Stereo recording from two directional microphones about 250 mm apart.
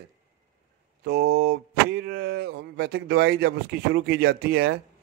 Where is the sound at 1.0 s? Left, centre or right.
Right.